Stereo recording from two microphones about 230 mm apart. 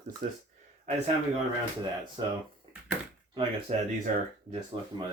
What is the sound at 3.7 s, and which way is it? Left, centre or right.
Speech, right.